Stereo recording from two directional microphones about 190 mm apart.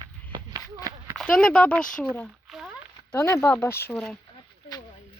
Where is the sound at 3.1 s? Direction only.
10° left (ahead or behind).